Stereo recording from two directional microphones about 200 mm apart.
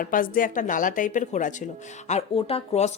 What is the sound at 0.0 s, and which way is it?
Speech, 45° left (ahead or behind).